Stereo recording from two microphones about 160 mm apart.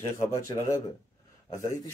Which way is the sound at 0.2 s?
20° left (ahead or behind).